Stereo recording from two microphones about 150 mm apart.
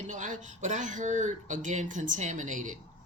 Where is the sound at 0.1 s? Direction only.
60° right (ahead or behind).